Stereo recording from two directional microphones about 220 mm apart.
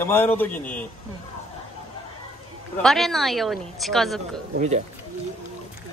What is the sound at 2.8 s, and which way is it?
A woman's voice, centre (ahead or behind).